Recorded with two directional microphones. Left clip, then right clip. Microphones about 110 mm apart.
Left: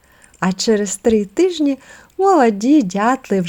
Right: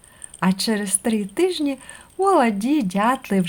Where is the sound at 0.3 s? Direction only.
45° left (ahead or behind).